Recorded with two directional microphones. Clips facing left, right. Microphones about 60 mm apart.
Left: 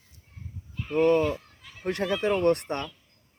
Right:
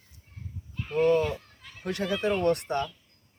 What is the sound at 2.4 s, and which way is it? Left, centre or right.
Speech, left.